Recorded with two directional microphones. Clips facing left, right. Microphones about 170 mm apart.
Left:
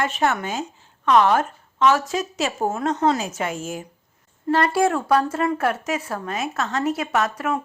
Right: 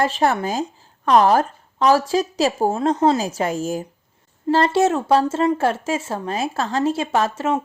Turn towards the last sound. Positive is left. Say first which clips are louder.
# right 3 dB
turn(degrees=-25)  # may be behind; listen again after turning